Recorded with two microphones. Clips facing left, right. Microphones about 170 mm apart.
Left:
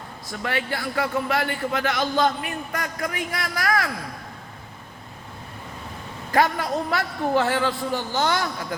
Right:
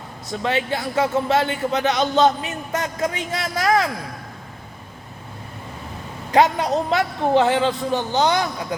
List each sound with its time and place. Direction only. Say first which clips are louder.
0.3 s a man's voice: right 5 dB; 20° right (ahead or behind)
6.3 s a man's voice: right 4 dB; 20° right (ahead or behind)